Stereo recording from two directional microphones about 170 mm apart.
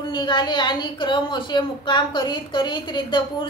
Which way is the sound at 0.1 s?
25° left (ahead or behind).